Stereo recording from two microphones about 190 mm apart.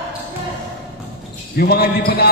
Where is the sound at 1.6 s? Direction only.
55° left (ahead or behind).